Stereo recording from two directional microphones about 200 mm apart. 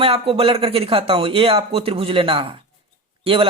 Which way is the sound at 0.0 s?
30° right (ahead or behind).